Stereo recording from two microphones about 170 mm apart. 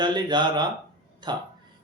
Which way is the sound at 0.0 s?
25° right (ahead or behind).